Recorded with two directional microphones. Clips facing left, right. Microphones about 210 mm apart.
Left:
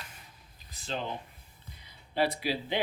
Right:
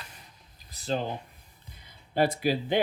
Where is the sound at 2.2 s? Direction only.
45° right (ahead or behind).